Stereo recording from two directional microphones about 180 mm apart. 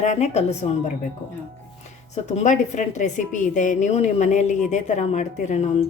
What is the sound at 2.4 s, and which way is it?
A woman's voice, 45° left (ahead or behind).